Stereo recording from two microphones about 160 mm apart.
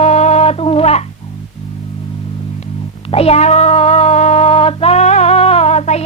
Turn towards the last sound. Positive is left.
turn(degrees=40)  # may be behind; listen again after turning